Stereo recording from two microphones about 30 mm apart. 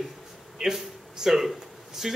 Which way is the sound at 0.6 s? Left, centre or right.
Centre.